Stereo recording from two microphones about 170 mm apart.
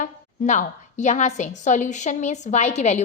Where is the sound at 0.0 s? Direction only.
45° left (ahead or behind).